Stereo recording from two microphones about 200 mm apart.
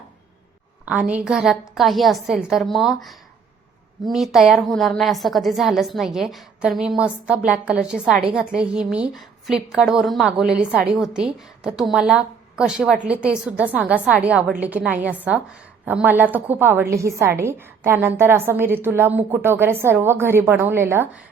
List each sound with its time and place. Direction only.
0.9 s a woman's voice: 5° right (ahead or behind)